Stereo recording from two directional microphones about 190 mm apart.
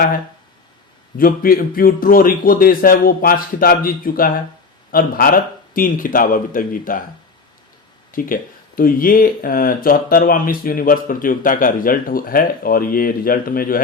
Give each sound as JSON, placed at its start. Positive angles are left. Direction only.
{"t": 1.2, "sound": "speech", "side_deg": 50}
{"t": 8.1, "sound": "speech", "side_deg": 45}